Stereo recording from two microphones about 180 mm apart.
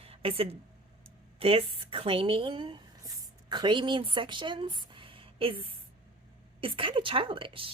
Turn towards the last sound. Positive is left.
turn(degrees=-30)  # may be behind; listen again after turning